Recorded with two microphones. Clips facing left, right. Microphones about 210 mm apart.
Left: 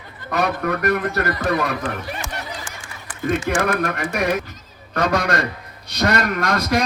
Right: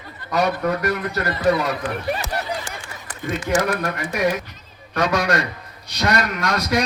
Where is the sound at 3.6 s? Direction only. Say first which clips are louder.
Left 2 dB; 55° left (ahead or behind).